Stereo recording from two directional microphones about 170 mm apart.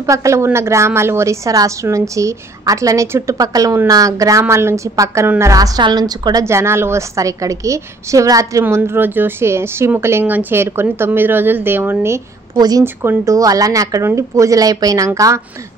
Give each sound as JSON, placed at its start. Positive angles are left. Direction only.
{"t": 0.0, "sound": "a woman's voice", "side_deg": -20}